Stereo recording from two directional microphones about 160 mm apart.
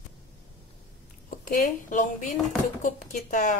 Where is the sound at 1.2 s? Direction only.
55° left (ahead or behind).